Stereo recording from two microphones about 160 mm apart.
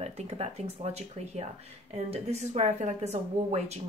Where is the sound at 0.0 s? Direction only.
40° right (ahead or behind).